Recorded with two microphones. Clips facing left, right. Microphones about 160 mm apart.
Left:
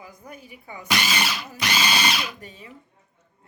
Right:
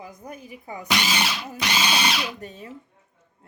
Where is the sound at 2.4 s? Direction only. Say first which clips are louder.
Right 5 dB; 45° right (ahead or behind).